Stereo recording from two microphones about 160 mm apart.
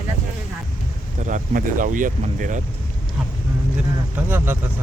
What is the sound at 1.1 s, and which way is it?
Speech, 50° right (ahead or behind).